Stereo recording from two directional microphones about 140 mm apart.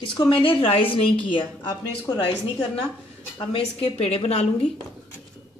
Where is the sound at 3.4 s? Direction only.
45° left (ahead or behind).